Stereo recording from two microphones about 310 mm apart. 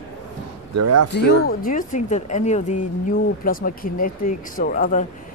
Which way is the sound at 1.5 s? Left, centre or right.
Left.